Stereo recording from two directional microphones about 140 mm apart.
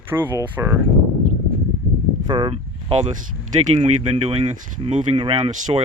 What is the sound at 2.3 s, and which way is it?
Speech, 35° right (ahead or behind).